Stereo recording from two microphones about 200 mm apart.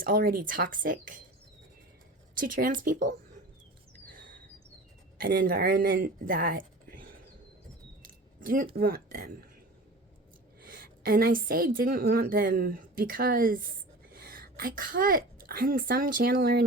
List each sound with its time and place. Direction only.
0.0 s speech: 45° right (ahead or behind)
2.4 s speech: 45° right (ahead or behind)
5.2 s speech: 45° right (ahead or behind)
10.6 s a woman's voice: 45° right (ahead or behind)